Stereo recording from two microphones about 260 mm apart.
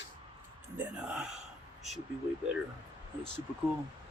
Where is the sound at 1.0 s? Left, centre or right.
Centre.